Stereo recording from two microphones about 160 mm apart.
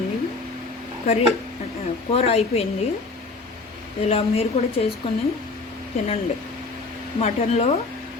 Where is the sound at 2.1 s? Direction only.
40° left (ahead or behind).